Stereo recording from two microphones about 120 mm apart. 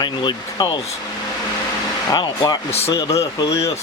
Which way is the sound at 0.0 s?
40° left (ahead or behind).